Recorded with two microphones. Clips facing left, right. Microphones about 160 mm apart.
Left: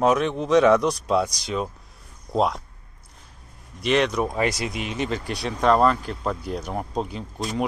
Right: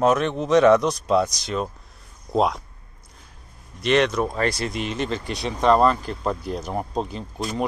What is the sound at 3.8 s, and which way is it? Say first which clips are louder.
Speech: right 2 dB; 5° left (ahead or behind).